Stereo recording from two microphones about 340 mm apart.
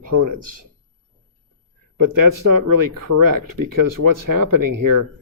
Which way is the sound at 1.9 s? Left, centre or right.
Right.